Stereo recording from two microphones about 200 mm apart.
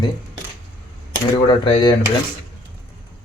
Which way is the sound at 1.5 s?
20° left (ahead or behind).